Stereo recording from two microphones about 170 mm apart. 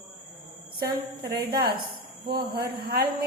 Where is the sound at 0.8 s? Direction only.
65° right (ahead or behind).